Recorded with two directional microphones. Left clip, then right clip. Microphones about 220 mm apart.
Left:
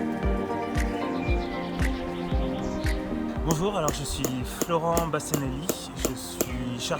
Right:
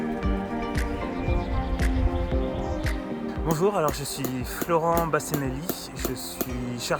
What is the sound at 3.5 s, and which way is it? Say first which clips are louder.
Speech: right 4 dB; 15° right (ahead or behind).